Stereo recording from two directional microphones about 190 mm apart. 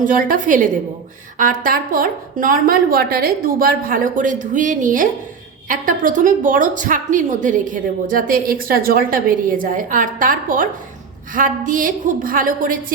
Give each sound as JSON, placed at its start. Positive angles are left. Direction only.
{"t": 0.0, "sound": "a woman's voice", "side_deg": -45}